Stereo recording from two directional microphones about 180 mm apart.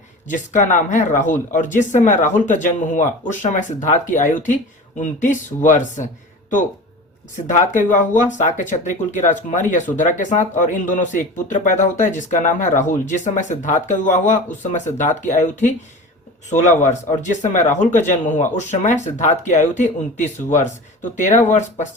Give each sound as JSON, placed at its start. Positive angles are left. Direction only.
{"t": 0.3, "sound": "speech", "side_deg": 45}
{"t": 7.9, "sound": "speech", "side_deg": 45}